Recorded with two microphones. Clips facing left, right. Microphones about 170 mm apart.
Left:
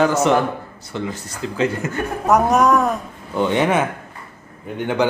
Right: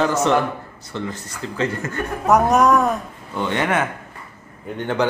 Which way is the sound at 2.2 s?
Centre (ahead or behind).